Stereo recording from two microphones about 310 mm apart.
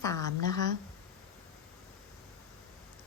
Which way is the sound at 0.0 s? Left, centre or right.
Centre.